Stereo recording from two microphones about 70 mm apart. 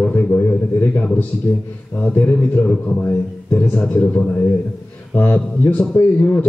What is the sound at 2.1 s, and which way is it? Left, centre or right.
A man's voice, left.